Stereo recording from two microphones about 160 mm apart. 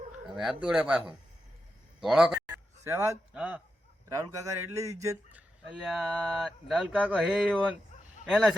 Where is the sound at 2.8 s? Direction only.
15° right (ahead or behind).